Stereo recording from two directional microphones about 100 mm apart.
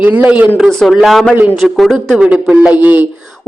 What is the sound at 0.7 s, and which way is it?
A man's voice, 5° left (ahead or behind).